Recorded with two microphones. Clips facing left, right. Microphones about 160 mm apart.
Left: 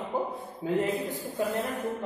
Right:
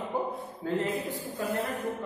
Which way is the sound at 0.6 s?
15° left (ahead or behind).